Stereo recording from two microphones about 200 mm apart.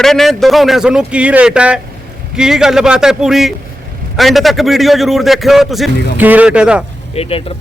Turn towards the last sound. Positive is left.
turn(degrees=30)  # may be behind; listen again after turning